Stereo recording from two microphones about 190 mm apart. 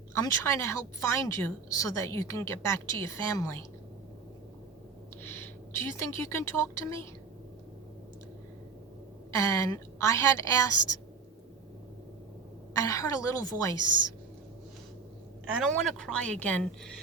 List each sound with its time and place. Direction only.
0.1 s a woman's voice: 15° left (ahead or behind)
5.2 s a woman's voice: 10° left (ahead or behind)
9.3 s a woman's voice: 15° left (ahead or behind)
12.7 s a woman's voice: 15° left (ahead or behind)
15.5 s a woman's voice: 5° left (ahead or behind)